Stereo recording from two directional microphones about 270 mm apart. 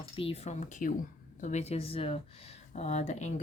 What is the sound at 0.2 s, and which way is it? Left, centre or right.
Speech, left.